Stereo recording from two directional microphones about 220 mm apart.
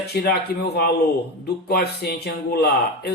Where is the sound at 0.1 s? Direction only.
45° left (ahead or behind).